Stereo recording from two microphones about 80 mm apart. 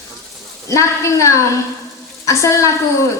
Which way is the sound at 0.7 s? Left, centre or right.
Left.